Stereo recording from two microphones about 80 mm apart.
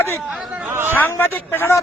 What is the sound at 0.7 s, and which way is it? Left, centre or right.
Speech, right.